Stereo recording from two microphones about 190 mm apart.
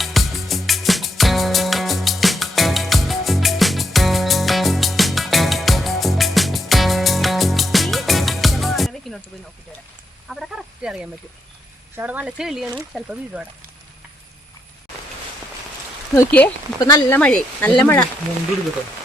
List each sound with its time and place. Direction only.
0.0 s music: centre (ahead or behind)
10.2 s a sound: centre (ahead or behind)
11.9 s speech: 10° right (ahead or behind)
16.1 s speech: 10° left (ahead or behind)